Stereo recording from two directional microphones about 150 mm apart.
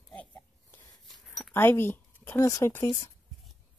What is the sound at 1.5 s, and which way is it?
Speech, 15° left (ahead or behind).